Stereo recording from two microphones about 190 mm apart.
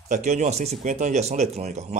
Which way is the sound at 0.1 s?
40° right (ahead or behind).